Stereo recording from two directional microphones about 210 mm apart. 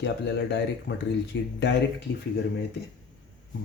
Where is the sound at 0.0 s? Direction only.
55° left (ahead or behind).